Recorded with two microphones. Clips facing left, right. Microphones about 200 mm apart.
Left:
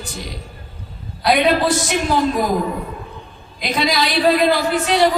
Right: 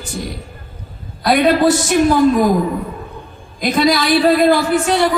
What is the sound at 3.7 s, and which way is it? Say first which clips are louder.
Speech: right 5 dB; 50° right (ahead or behind).